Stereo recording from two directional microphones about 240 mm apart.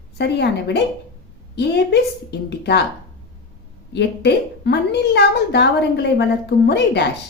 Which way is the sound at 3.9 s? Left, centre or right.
Left.